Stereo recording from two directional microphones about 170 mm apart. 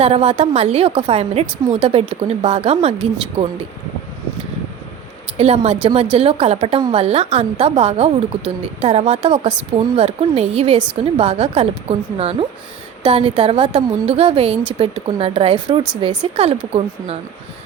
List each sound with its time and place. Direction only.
0.0 s speech: 35° right (ahead or behind)
5.4 s speech: 35° right (ahead or behind)